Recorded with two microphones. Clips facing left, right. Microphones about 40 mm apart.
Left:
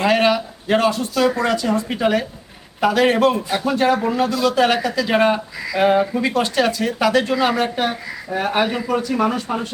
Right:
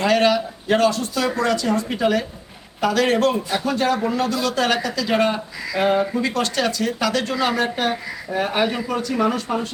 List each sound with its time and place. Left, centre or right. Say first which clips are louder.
0.0 s speech: left 1 dB; centre